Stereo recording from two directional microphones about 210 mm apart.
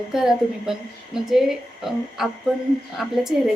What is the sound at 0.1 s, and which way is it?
A woman's voice, centre (ahead or behind).